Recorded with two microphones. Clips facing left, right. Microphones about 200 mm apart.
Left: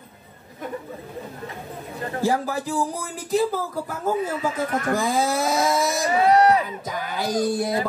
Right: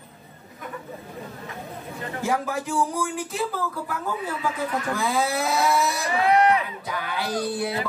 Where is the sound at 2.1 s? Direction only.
35° left (ahead or behind).